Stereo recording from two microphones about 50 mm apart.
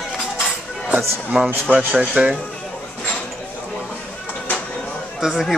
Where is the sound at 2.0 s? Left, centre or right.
Right.